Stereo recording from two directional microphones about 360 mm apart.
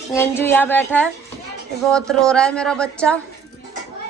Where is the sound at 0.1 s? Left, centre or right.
Centre.